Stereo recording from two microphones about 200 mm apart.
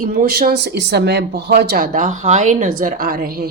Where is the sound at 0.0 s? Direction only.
45° right (ahead or behind).